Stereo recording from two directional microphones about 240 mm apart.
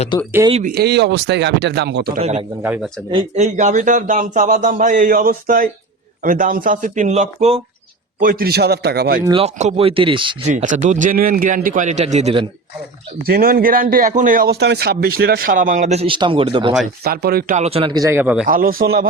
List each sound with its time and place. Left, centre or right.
0.5 s speech: right
2.6 s a man's voice: centre
3.1 s a man's voice: right
9.2 s speech: right
13.2 s a man's voice: right
17.0 s a man's voice: right
17.6 s a man's voice: right; by 18.4 s centre
18.4 s a man's voice: right